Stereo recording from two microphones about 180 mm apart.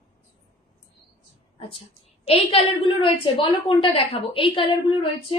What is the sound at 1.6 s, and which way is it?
A woman's voice, 30° left (ahead or behind).